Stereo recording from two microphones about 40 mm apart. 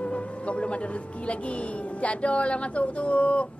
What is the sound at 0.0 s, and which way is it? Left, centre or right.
Music, left.